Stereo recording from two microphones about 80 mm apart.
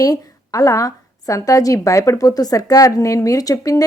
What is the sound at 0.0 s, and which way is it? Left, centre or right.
A woman's voice, left.